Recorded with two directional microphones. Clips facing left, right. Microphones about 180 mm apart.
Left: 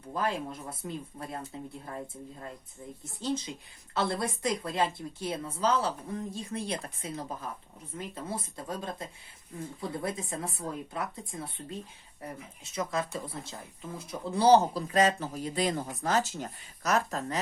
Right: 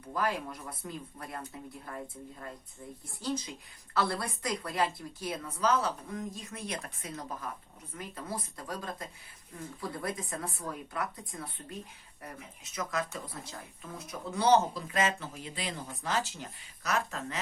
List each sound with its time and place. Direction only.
0.1 s speech: 25° left (ahead or behind)
3.0 s speech: 25° left (ahead or behind); by 17.4 s 40° left (ahead or behind)